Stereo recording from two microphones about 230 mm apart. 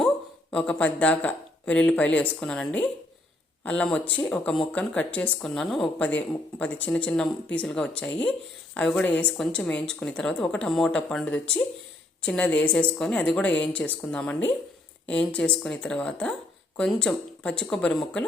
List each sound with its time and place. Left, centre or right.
0.5 s a woman's voice: centre